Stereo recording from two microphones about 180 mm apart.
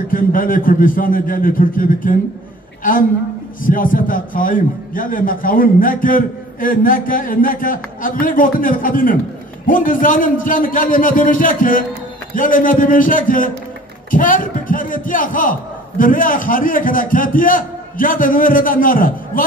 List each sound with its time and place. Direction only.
0.1 s a man's voice: 50° left (ahead or behind)